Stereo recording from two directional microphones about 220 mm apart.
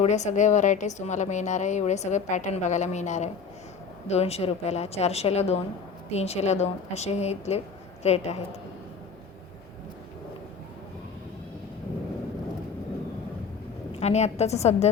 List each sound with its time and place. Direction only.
0.0 s a woman's voice: 30° left (ahead or behind)
14.0 s a woman's voice: 30° left (ahead or behind)